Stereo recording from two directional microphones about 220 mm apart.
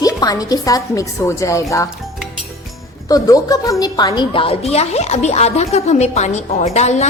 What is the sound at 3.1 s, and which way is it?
A woman's voice, 15° left (ahead or behind).